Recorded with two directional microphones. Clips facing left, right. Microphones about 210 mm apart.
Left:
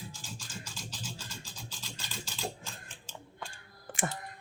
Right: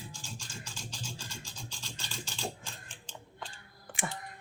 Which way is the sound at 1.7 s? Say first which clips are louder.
Even; 5° left (ahead or behind).